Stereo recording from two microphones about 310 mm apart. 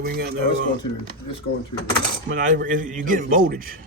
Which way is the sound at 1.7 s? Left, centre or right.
Left.